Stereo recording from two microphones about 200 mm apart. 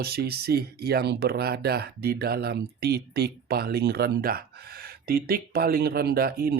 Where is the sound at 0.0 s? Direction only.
50° right (ahead or behind).